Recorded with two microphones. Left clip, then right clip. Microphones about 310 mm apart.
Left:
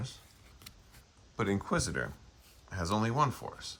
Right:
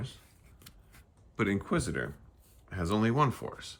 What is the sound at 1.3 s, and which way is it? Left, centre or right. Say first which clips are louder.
Speech: right 1 dB; centre.